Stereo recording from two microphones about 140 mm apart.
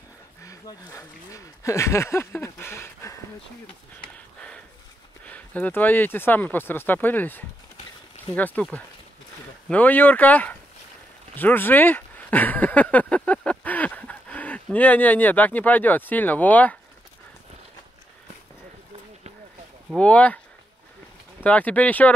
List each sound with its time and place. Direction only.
0.4 s speech: 25° left (ahead or behind)
5.3 s speech: 10° left (ahead or behind)
9.7 s speech: 10° left (ahead or behind)
20.0 s speech: 10° left (ahead or behind)
21.5 s speech: 10° left (ahead or behind)